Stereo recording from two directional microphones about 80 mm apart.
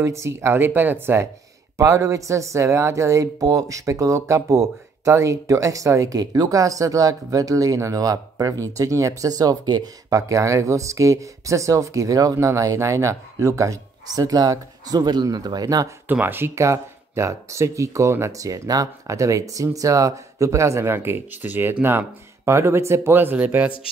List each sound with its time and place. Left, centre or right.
0.0 s speech: right
10.1 s speech: right
16.1 s speech: right